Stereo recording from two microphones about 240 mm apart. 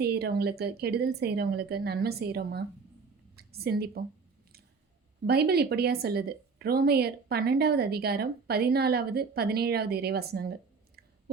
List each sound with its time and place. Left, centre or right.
0.0 s a woman's voice: right
5.2 s a woman's voice: right